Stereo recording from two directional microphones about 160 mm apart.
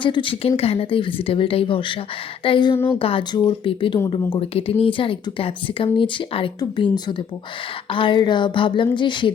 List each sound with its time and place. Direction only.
0.0 s speech: 30° left (ahead or behind)
2.7 s speech: 15° left (ahead or behind)
3.0 s speech: 35° left (ahead or behind)